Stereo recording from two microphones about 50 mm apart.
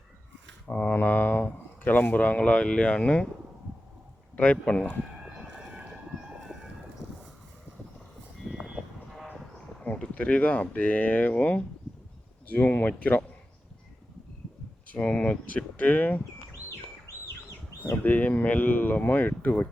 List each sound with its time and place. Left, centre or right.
0.7 s speech: left
4.4 s speech: left
5.4 s a sound: right
8.4 s vehicle: centre
9.9 s speech: left
14.9 s speech: left
17.1 s bird: left
17.9 s speech: left